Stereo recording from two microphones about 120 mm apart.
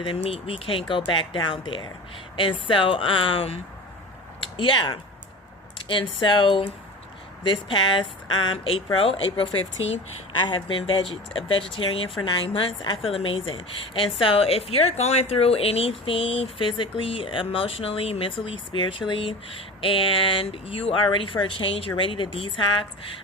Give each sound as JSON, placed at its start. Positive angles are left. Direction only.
{"t": 0.0, "sound": "speech", "side_deg": 45}
{"t": 4.4, "sound": "a sound", "side_deg": 45}
{"t": 5.9, "sound": "speech", "side_deg": 45}